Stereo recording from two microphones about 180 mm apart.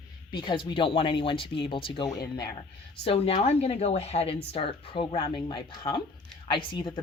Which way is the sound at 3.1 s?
30° left (ahead or behind).